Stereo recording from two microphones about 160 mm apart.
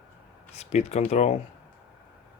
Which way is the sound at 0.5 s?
45° left (ahead or behind).